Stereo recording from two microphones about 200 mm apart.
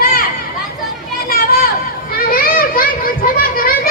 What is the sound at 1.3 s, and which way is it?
Children playing, 45° left (ahead or behind).